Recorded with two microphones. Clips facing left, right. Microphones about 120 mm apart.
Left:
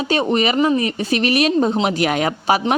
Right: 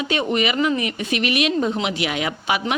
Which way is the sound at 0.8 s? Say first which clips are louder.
Left 4 dB; 35° left (ahead or behind).